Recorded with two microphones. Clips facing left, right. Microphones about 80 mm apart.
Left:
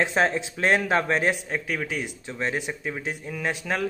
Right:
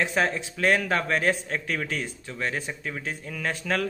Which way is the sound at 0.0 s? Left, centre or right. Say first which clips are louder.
Left 2 dB; left.